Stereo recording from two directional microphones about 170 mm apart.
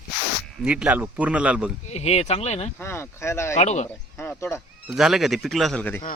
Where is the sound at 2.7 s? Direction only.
15° left (ahead or behind).